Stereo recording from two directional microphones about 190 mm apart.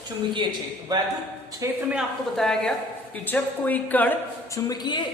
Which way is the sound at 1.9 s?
Centre (ahead or behind).